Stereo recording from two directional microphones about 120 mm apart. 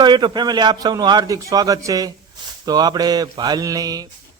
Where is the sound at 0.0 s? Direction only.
40° right (ahead or behind).